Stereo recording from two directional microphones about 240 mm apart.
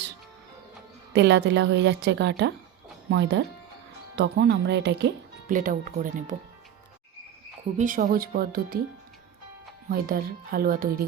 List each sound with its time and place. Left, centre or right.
1.1 s speech: right
7.8 s speech: right
9.9 s speech: right